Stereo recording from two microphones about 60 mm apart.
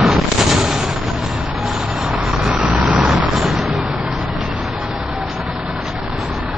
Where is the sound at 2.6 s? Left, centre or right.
Right.